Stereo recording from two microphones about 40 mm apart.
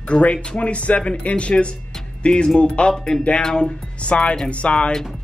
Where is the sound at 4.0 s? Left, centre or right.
Left.